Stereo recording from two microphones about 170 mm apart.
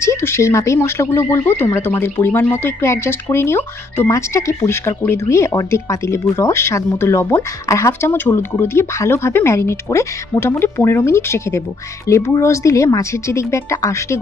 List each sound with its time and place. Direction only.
0.0 s speech: 15° left (ahead or behind)